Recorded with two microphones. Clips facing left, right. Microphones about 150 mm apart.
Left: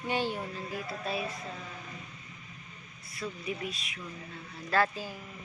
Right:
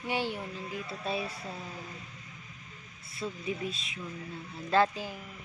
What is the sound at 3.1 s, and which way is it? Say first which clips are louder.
Speech: right 1 dB; 25° right (ahead or behind).